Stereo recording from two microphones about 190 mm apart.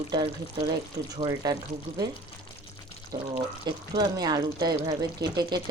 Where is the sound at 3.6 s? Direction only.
20° right (ahead or behind).